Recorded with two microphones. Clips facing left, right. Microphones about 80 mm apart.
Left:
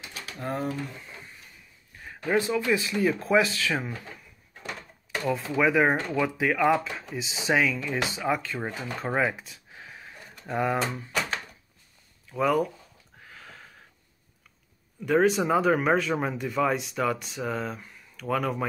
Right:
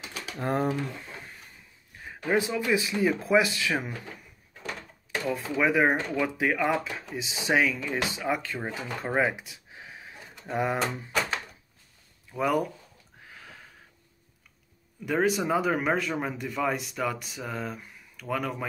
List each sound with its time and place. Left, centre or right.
0.4 s speech: right
2.0 s speech: centre
5.3 s speech: centre
8.6 s a sound: centre
12.3 s speech: centre
15.0 s speech: centre